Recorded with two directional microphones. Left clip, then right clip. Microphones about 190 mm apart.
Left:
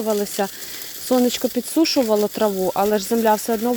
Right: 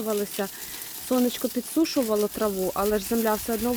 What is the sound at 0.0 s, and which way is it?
Speech, 20° left (ahead or behind).